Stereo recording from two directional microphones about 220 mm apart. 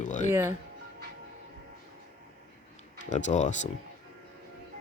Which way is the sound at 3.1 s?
35° left (ahead or behind).